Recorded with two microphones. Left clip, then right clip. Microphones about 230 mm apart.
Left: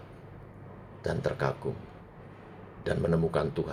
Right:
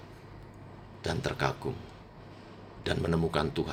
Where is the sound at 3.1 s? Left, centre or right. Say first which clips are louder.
Left 2 dB; right.